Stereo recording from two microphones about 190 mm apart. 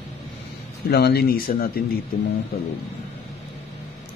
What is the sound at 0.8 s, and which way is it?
Speech, 55° left (ahead or behind).